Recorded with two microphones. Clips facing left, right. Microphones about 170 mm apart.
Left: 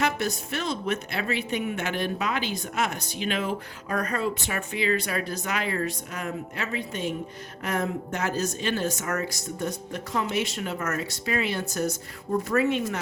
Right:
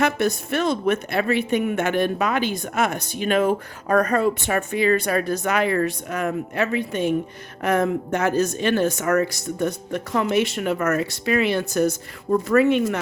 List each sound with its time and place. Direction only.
0.0 s a woman's voice: 55° right (ahead or behind)